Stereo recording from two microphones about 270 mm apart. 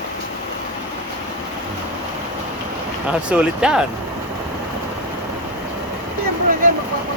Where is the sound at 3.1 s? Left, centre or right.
Centre.